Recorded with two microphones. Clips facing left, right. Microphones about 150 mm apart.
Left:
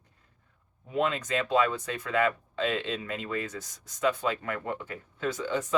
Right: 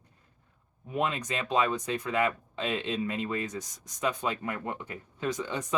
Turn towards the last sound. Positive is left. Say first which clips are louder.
# left 2 dB
turn(degrees=-15)  # may be behind; listen again after turning